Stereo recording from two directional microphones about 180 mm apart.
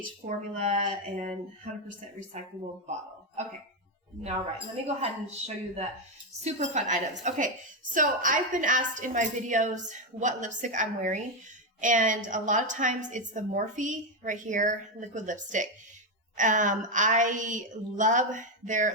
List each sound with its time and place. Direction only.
0.3 s a woman's voice: 45° right (ahead or behind)
4.2 s a woman's voice: 35° right (ahead or behind)